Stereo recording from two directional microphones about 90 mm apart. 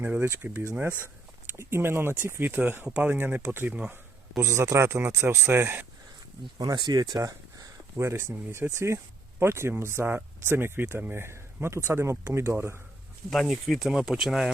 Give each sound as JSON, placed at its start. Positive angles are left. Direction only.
{"t": 0.0, "sound": "speech", "side_deg": -25}
{"t": 4.4, "sound": "speech", "side_deg": -30}
{"t": 6.6, "sound": "speech", "side_deg": -50}
{"t": 13.3, "sound": "speech", "side_deg": 0}